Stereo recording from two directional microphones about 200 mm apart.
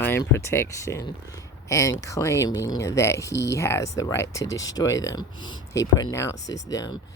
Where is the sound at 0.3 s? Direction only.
15° left (ahead or behind).